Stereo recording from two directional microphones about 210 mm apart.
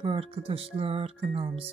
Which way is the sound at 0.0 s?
25° right (ahead or behind).